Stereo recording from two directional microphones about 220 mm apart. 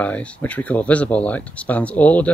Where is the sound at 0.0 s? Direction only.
5° left (ahead or behind).